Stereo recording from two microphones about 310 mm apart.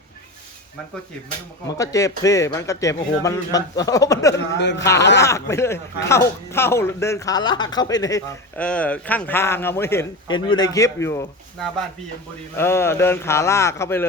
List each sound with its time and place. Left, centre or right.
1.6 s speech: centre
4.5 s speech: left
4.8 s speech: centre